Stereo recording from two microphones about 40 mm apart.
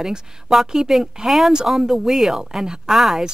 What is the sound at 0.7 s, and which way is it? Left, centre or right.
Speech, centre.